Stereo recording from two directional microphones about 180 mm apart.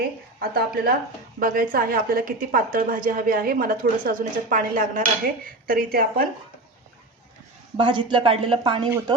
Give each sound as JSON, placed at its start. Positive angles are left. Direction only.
{"t": 0.3, "sound": "a woman's voice", "side_deg": -60}
{"t": 7.8, "sound": "speech", "side_deg": -25}